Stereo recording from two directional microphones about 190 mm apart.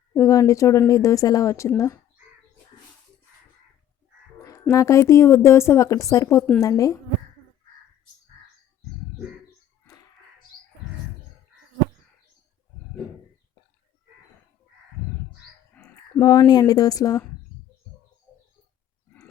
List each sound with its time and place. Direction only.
0.2 s speech: 15° left (ahead or behind)
4.7 s speech: 15° left (ahead or behind)
15.7 s a sound: 5° left (ahead or behind)
16.2 s speech: 20° left (ahead or behind)